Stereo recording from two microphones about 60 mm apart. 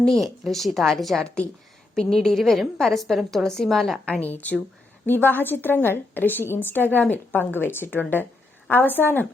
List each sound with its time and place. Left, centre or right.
0.0 s a woman's voice: centre
4.0 s a woman's voice: left